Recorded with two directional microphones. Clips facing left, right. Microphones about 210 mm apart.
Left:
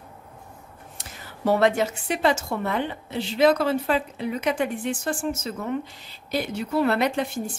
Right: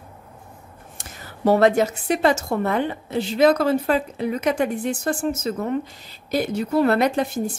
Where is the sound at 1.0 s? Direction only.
40° right (ahead or behind).